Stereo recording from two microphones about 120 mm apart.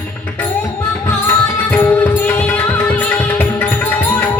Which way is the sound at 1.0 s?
20° left (ahead or behind).